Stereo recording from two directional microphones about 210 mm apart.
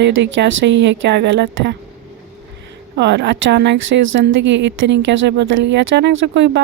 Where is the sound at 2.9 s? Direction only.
55° right (ahead or behind).